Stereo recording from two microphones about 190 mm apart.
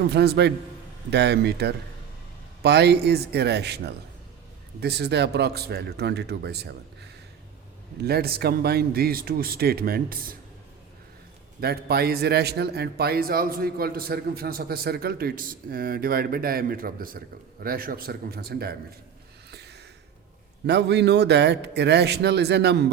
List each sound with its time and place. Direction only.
0.0 s a man's voice: 60° right (ahead or behind)
11.6 s a man's voice: 55° right (ahead or behind)
19.5 s a sound: 60° right (ahead or behind)
20.7 s speech: 60° right (ahead or behind)